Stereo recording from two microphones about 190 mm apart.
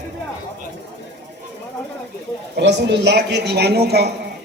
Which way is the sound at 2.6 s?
65° right (ahead or behind).